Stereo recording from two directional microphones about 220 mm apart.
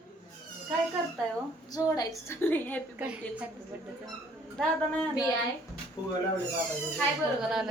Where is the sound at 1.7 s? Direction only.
15° left (ahead or behind).